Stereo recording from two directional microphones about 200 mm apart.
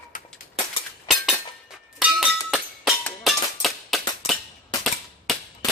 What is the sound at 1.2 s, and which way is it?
Chink, centre (ahead or behind).